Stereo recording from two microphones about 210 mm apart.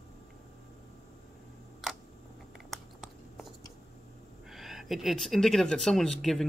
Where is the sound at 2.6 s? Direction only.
Centre (ahead or behind).